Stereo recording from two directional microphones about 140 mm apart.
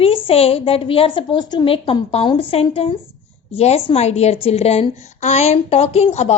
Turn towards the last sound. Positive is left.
turn(degrees=50)  # may be behind; listen again after turning